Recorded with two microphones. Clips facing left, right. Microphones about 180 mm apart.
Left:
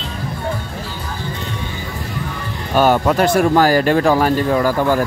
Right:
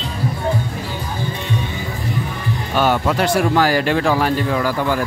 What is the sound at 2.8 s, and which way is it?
Speech, 45° left (ahead or behind).